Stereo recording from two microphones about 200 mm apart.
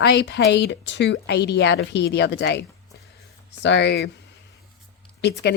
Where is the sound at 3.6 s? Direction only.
60° left (ahead or behind).